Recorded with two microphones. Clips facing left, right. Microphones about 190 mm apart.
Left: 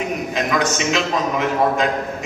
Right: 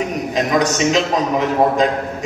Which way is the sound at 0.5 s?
40° right (ahead or behind).